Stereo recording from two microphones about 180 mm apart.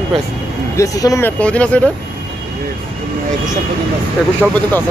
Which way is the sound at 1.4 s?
5° left (ahead or behind).